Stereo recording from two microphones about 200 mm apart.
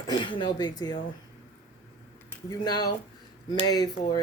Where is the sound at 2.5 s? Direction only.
20° left (ahead or behind).